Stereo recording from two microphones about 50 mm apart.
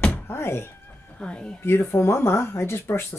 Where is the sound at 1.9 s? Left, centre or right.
Left.